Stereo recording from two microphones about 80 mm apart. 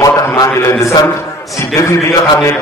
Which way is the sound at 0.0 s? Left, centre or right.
Left.